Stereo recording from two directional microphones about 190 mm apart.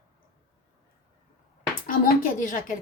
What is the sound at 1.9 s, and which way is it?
Speech, 45° left (ahead or behind).